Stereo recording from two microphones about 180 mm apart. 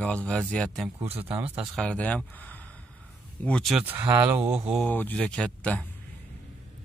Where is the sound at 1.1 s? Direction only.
35° right (ahead or behind).